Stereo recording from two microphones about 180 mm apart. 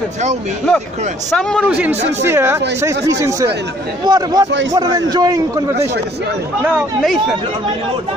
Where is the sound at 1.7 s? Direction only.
10° right (ahead or behind).